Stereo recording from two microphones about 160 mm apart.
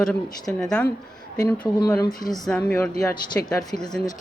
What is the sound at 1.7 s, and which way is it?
Speech, 20° left (ahead or behind).